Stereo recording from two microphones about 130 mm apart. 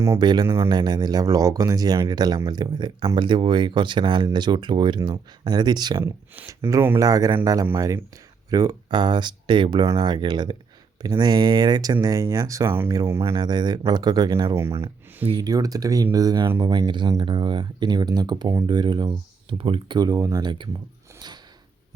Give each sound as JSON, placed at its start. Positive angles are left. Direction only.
{"t": 0.2, "sound": "speech", "side_deg": -35}
{"t": 0.4, "sound": "speech", "side_deg": -20}
{"t": 0.7, "sound": "speech", "side_deg": -35}
{"t": 6.3, "sound": "speech", "side_deg": -20}
{"t": 13.3, "sound": "speech", "side_deg": -35}
{"t": 14.5, "sound": "speech", "side_deg": -20}